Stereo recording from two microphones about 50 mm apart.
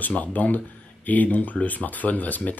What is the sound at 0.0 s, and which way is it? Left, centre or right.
Speech, left.